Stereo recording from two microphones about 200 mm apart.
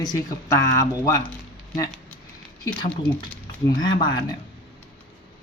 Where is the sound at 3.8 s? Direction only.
20° left (ahead or behind).